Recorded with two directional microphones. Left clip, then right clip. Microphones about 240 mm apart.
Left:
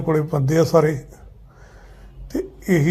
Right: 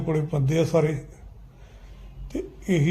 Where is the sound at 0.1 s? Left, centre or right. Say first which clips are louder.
Left 7 dB; left.